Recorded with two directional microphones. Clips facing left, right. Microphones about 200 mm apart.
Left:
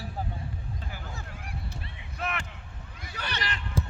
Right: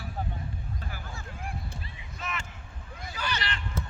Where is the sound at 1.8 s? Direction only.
60° left (ahead or behind).